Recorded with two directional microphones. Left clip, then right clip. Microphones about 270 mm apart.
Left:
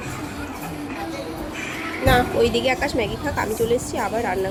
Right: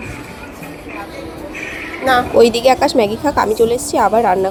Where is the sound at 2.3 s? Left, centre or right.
Right.